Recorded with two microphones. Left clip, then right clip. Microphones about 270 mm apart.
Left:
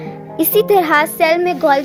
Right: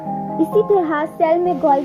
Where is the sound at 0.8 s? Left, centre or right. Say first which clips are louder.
Left 5 dB; left.